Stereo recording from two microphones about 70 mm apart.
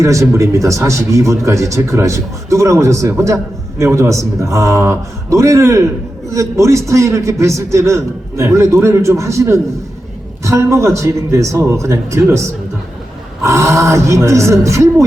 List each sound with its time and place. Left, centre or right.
0.0 s a man's voice: right
13.4 s a man's voice: right